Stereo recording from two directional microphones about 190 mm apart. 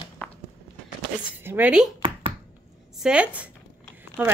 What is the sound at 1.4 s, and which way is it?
Speech, 10° right (ahead or behind).